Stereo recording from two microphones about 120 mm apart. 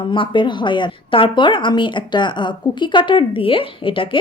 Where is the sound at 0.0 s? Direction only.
45° left (ahead or behind).